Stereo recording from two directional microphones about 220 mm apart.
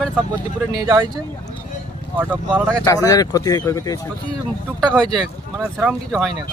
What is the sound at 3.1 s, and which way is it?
Speech, 15° left (ahead or behind).